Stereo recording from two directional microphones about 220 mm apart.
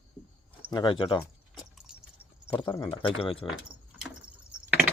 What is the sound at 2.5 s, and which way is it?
Speech, 5° left (ahead or behind).